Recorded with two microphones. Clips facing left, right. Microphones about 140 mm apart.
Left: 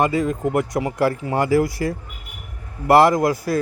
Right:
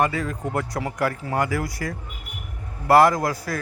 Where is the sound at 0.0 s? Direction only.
20° left (ahead or behind).